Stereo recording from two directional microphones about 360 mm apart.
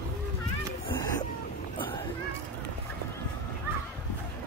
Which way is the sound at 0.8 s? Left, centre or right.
Centre.